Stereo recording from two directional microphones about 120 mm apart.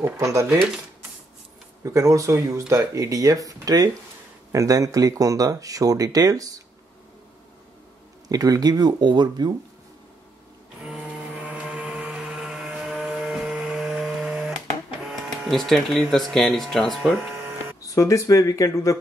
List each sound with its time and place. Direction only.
0.0 s speech: 25° right (ahead or behind)
1.8 s speech: 25° right (ahead or behind)
8.3 s speech: 30° right (ahead or behind)
10.8 s blender: 5° right (ahead or behind)
15.0 s speech: centre (ahead or behind)
17.8 s speech: 25° left (ahead or behind)